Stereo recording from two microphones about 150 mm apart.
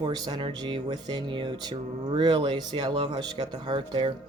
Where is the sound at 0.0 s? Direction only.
30° right (ahead or behind).